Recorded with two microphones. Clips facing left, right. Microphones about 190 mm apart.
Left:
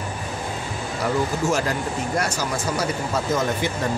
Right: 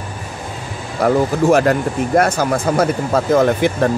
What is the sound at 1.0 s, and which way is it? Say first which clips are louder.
Speech: right 9 dB; 60° right (ahead or behind).